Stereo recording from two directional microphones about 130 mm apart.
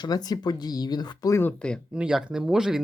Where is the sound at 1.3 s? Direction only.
15° left (ahead or behind).